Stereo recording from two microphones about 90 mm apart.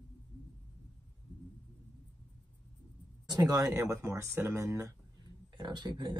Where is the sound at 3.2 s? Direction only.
45° right (ahead or behind).